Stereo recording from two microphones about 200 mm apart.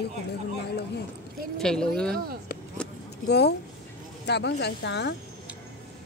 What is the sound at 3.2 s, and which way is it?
Speech, 55° left (ahead or behind).